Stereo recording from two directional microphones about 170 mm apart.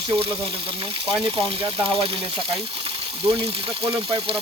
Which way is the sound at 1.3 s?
30° right (ahead or behind).